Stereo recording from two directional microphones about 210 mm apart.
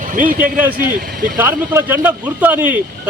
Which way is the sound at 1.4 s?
10° right (ahead or behind).